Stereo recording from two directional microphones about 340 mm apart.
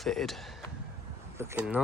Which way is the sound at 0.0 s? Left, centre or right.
Centre.